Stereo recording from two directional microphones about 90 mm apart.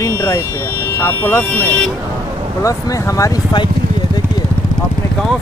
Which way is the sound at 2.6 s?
40° left (ahead or behind).